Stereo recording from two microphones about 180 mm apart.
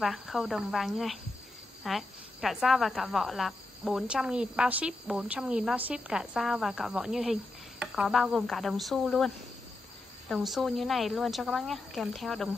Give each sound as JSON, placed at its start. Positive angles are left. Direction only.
{"t": 0.0, "sound": "speech", "side_deg": 0}